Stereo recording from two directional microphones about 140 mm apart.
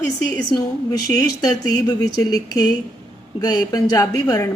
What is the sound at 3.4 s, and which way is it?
Speech, 25° left (ahead or behind).